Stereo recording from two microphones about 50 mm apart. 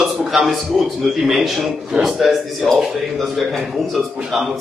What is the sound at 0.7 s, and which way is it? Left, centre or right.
Speech, centre.